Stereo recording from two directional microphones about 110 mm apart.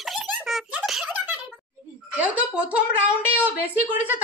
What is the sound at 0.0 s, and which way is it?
Giggle, centre (ahead or behind).